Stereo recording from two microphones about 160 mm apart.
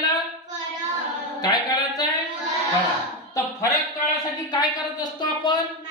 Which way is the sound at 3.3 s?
20° left (ahead or behind).